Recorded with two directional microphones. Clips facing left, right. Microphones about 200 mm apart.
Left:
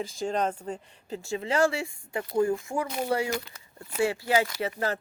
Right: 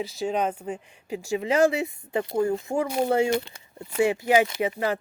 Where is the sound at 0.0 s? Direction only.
5° right (ahead or behind).